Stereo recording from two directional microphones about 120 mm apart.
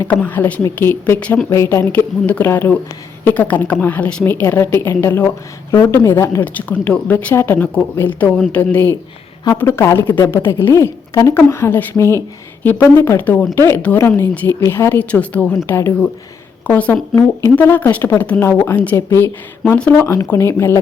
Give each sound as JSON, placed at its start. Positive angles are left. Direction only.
{"t": 0.0, "sound": "a woman's voice", "side_deg": 15}